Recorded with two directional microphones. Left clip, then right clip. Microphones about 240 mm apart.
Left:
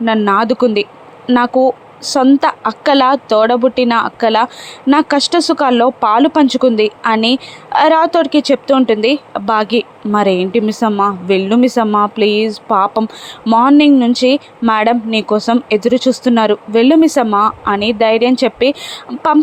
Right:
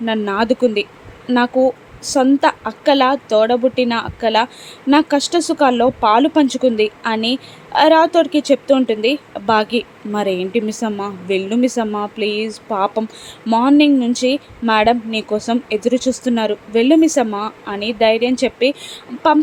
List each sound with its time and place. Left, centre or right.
0.0 s a woman's voice: centre